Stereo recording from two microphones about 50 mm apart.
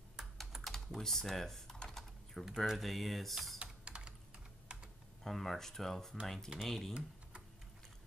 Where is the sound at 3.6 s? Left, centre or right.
Centre.